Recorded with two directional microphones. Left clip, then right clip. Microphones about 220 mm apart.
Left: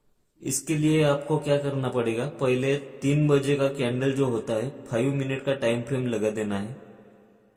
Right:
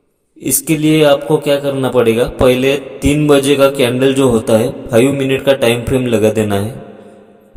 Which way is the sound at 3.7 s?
45° right (ahead or behind).